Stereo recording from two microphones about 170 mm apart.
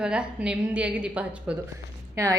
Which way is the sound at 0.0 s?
5° right (ahead or behind).